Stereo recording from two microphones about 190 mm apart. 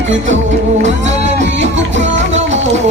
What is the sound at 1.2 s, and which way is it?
Music, 35° right (ahead or behind).